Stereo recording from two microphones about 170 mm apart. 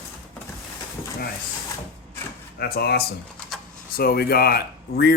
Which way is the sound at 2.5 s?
65° left (ahead or behind).